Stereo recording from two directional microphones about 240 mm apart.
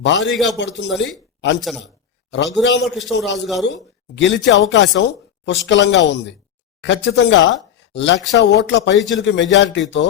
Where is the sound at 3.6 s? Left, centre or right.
Left.